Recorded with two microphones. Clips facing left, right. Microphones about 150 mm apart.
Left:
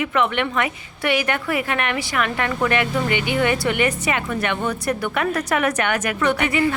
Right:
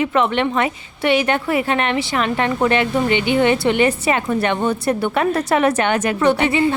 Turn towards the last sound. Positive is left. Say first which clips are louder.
# right 4 dB
turn(degrees=-30)  # may be behind; listen again after turning